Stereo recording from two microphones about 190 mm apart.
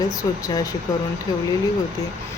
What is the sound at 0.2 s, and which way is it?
Speech, 20° left (ahead or behind).